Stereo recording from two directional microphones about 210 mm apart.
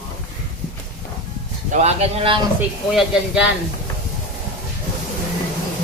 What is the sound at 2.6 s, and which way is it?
Speech, 5° right (ahead or behind).